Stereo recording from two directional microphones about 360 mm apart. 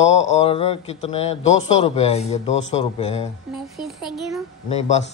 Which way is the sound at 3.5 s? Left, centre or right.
Centre.